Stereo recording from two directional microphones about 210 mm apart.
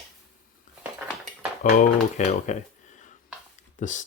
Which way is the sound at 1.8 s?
35° left (ahead or behind).